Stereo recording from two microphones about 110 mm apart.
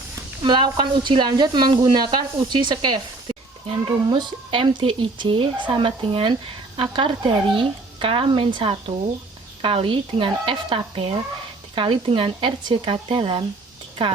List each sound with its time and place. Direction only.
0.4 s speech: 45° right (ahead or behind)